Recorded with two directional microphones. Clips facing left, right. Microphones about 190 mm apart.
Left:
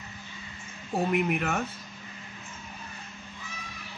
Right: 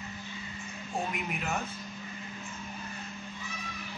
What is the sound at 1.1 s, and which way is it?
Speech, 60° left (ahead or behind).